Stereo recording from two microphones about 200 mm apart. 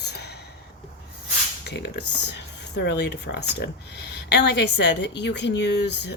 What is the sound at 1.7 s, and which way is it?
Speech, 65° left (ahead or behind).